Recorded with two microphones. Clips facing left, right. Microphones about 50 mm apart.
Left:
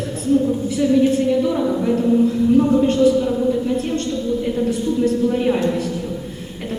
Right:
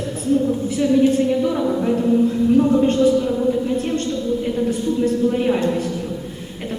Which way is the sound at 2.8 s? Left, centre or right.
Right.